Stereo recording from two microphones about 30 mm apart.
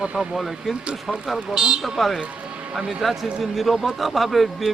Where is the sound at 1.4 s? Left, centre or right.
Right.